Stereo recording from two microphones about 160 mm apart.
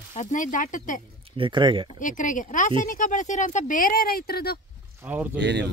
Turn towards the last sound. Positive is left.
turn(degrees=-90)